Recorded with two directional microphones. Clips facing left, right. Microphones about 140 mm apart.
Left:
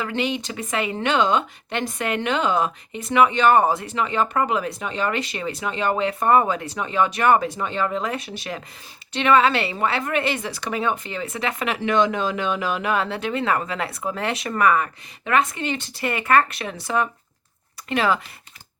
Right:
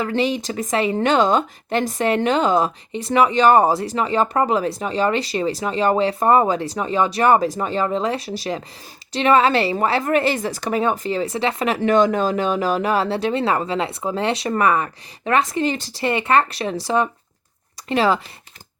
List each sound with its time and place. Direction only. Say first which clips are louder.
0.0 s speech: right 4 dB; 35° right (ahead or behind)